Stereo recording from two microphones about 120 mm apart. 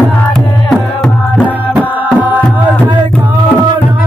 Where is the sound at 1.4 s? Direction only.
15° right (ahead or behind).